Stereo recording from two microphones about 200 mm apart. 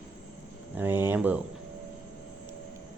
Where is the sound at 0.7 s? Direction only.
10° right (ahead or behind).